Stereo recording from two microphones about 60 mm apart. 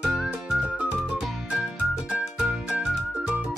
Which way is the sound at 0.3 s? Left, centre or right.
Centre.